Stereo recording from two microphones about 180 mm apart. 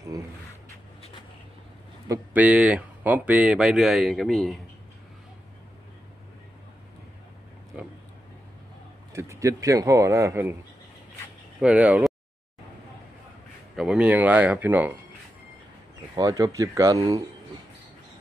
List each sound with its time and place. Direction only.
2.0 s speech: 10° right (ahead or behind)
9.1 s speech: 15° right (ahead or behind)
11.6 s speech: 5° right (ahead or behind)
13.7 s speech: 5° right (ahead or behind)
16.2 s speech: 20° right (ahead or behind)